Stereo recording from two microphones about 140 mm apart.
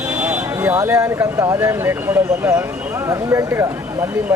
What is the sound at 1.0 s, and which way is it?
Speech, 20° right (ahead or behind).